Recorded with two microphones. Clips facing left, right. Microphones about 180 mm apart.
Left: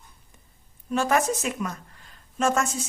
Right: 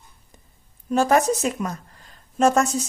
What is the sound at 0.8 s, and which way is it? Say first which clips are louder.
A woman's voice: right 5 dB; 40° right (ahead or behind).